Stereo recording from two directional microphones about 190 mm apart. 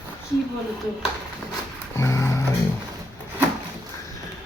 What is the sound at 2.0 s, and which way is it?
Music, 15° left (ahead or behind).